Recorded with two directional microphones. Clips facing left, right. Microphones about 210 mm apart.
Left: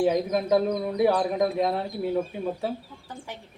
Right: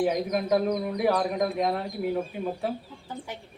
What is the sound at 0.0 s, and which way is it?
Speech, 30° left (ahead or behind).